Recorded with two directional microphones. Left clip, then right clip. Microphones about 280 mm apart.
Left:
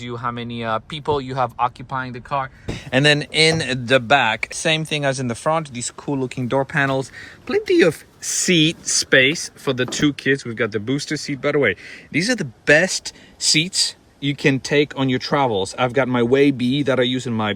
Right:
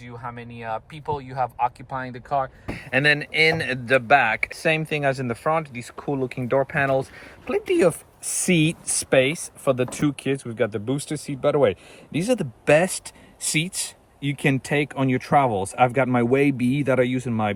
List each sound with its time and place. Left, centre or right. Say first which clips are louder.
0.0 s speech: left 9 dB; centre